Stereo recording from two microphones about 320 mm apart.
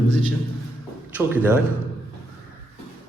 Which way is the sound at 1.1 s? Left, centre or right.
Centre.